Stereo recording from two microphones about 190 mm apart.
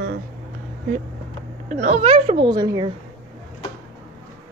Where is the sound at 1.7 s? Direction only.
40° right (ahead or behind); by 2.9 s 20° right (ahead or behind).